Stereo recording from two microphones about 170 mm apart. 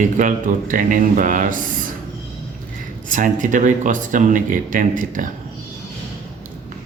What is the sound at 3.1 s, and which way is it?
Speech, 50° right (ahead or behind).